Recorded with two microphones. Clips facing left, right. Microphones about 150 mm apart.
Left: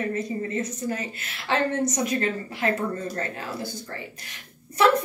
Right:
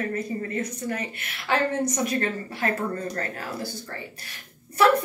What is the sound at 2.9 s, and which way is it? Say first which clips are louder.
Speech: even; 25° left (ahead or behind).